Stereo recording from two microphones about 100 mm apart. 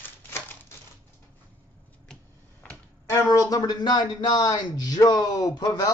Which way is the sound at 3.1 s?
35° left (ahead or behind).